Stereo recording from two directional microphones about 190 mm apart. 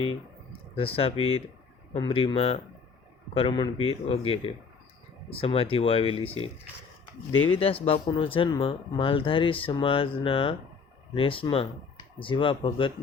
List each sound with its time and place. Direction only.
0.8 s speech: 30° left (ahead or behind)
7.5 s speech: 30° left (ahead or behind)